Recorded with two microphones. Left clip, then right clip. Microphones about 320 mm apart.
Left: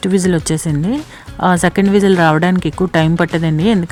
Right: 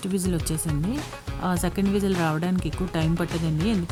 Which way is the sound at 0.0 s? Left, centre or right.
Right.